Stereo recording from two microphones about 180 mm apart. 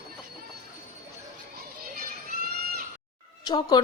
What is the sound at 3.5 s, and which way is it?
Speech, 20° left (ahead or behind).